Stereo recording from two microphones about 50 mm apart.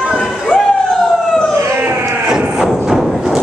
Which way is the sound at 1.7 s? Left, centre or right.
Right.